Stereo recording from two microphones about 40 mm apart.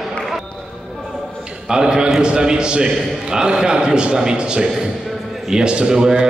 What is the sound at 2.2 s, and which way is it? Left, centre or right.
A man's voice, right.